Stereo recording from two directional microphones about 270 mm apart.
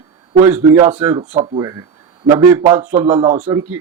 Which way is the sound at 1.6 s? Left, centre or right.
Centre.